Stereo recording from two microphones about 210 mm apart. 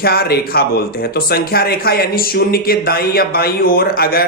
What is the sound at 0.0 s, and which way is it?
Speech, 45° left (ahead or behind).